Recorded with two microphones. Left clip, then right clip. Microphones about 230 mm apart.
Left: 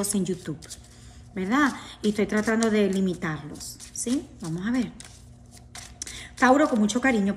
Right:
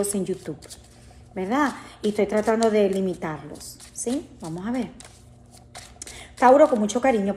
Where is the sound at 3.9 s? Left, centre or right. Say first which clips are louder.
Right 3 dB; right.